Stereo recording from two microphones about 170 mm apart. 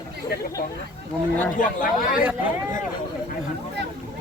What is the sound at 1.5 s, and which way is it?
Speech, 50° left (ahead or behind).